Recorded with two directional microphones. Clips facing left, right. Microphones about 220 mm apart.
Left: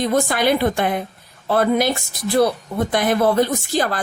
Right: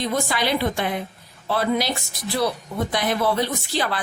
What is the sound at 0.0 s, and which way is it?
Speech, 50° left (ahead or behind).